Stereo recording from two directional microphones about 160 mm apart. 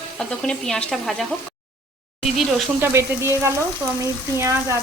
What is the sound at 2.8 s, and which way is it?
Speech, 15° right (ahead or behind).